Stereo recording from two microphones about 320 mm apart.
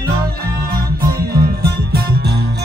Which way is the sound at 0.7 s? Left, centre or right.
Right.